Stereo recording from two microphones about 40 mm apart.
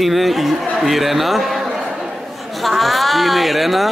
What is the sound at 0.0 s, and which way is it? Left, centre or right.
A man's voice, centre.